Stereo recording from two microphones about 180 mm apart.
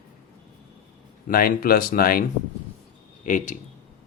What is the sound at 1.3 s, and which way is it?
Speech, 55° left (ahead or behind).